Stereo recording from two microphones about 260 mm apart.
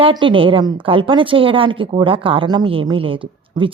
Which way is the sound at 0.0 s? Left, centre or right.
Centre.